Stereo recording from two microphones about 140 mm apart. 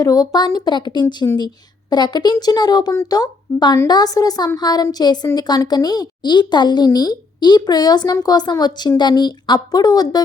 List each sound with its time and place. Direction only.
0.0 s a woman's voice: 25° left (ahead or behind)